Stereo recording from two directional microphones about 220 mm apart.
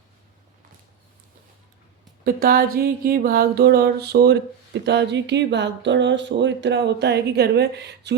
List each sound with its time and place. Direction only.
2.2 s music: 40° right (ahead or behind)